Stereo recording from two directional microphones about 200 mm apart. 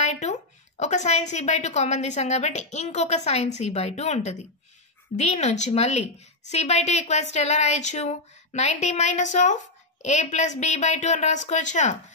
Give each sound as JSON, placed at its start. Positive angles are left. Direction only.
{"t": 0.0, "sound": "a woman's voice", "side_deg": 35}